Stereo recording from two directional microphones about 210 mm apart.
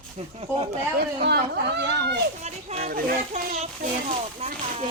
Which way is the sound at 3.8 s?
30° right (ahead or behind).